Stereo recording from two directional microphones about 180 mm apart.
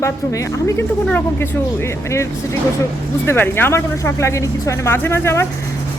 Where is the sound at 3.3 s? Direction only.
10° left (ahead or behind).